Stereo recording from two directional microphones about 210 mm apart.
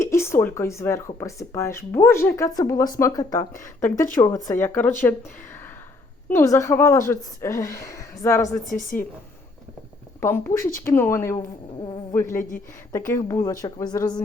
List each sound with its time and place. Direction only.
0.0 s speech: 10° left (ahead or behind)
6.3 s speech: 15° left (ahead or behind)
10.2 s speech: 10° left (ahead or behind)